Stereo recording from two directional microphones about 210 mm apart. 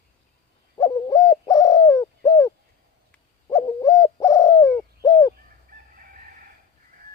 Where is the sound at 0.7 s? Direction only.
15° left (ahead or behind).